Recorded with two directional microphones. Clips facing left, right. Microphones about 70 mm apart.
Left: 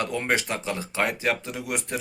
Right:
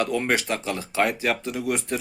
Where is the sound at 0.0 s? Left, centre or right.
Left.